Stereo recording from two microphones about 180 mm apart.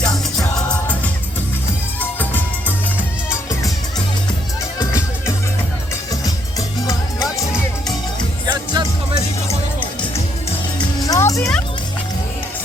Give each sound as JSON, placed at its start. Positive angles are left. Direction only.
{"t": 0.0, "sound": "music", "side_deg": 5}
{"t": 8.4, "sound": "music", "side_deg": -25}
{"t": 11.0, "sound": "music", "side_deg": 20}